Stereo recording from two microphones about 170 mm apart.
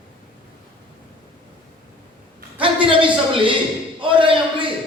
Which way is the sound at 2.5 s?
30° right (ahead or behind).